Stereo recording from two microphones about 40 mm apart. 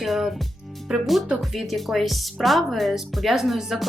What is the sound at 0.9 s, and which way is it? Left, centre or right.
Speech, centre.